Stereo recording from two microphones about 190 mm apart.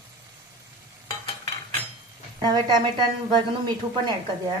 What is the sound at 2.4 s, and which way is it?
Speech, 20° right (ahead or behind).